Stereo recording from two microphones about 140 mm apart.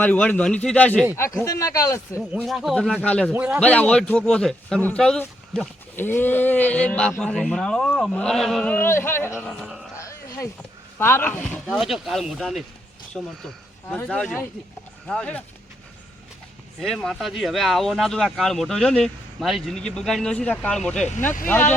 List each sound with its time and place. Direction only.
0.0 s speech: 10° left (ahead or behind)
1.1 s speech: 20° left (ahead or behind)
2.1 s speech: 5° right (ahead or behind)
3.3 s a man's voice: 10° right (ahead or behind)
3.6 s speech: 10° left (ahead or behind)
9.4 s speech: 5° left (ahead or behind)
10.0 s a sound: 20° left (ahead or behind)
10.9 s speech: 15° left (ahead or behind)
11.7 s speech: centre (ahead or behind)
16.8 s speech: centre (ahead or behind)